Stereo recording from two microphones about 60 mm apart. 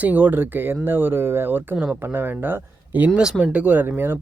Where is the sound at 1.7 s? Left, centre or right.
Right.